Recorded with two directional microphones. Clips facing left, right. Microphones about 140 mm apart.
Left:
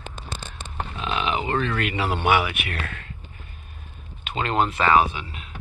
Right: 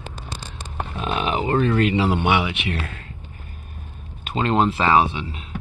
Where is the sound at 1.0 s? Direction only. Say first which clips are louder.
Right 3 dB; 45° right (ahead or behind); by 3.0 s 30° right (ahead or behind).